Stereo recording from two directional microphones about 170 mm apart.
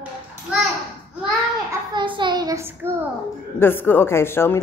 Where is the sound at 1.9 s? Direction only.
30° right (ahead or behind).